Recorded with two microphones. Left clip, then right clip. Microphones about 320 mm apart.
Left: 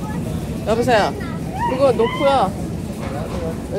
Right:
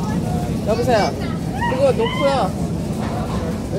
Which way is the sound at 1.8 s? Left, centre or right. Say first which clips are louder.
Left 2 dB; left.